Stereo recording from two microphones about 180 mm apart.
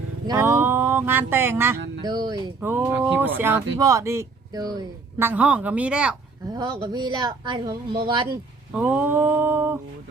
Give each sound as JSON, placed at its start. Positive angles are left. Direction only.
{"t": 0.3, "sound": "speech", "side_deg": -15}
{"t": 2.0, "sound": "speech", "side_deg": -25}
{"t": 2.6, "sound": "speech", "side_deg": -10}
{"t": 5.2, "sound": "speech", "side_deg": -10}
{"t": 6.5, "sound": "speech", "side_deg": -20}
{"t": 8.7, "sound": "speech", "side_deg": -10}